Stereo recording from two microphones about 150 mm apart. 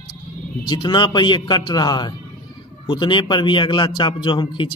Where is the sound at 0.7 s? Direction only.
30° left (ahead or behind).